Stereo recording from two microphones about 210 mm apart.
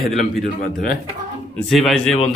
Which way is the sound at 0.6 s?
45° left (ahead or behind).